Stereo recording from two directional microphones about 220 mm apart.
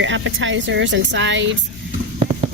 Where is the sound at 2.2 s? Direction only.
25° right (ahead or behind).